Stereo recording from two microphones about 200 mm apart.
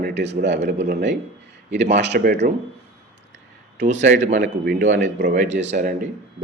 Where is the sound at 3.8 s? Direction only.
35° right (ahead or behind).